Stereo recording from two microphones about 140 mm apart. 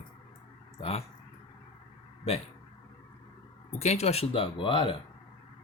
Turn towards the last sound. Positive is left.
turn(degrees=35)  # may be behind; listen again after turning